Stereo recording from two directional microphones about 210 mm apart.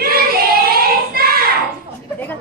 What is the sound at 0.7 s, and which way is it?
Child singing, 45° right (ahead or behind).